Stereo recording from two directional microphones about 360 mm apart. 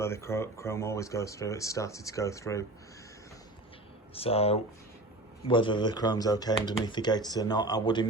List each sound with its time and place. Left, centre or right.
0.0 s speech: centre
4.1 s speech: centre